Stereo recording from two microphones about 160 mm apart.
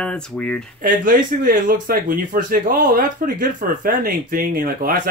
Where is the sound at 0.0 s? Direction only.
5° left (ahead or behind).